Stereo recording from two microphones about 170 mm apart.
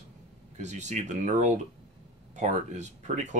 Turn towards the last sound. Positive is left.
turn(degrees=-45)  # may be behind; listen again after turning